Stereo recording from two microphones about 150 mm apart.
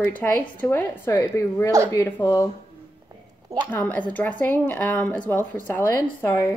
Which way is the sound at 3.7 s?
10° left (ahead or behind).